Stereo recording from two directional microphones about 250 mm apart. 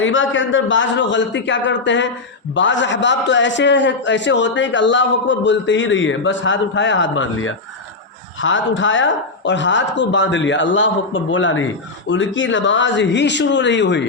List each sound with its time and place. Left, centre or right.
0.0 s a man's voice: left